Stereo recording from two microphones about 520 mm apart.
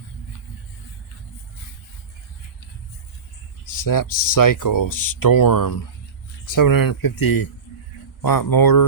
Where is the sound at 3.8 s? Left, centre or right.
Left.